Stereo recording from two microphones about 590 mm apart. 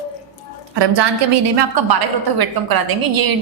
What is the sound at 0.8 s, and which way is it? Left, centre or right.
A woman's voice, right.